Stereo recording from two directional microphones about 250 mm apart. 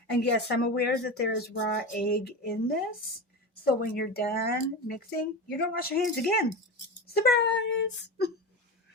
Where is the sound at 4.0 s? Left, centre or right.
Left.